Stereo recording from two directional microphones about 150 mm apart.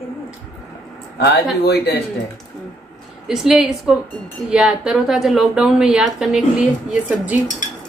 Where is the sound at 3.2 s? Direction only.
5° right (ahead or behind).